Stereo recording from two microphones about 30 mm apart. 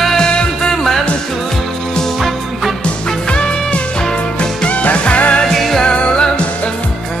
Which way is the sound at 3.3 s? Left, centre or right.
Left.